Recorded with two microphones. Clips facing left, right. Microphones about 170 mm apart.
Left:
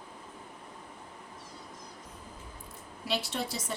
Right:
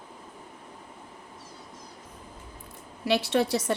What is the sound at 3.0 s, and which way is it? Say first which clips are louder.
Speech: right 9 dB; 70° right (ahead or behind).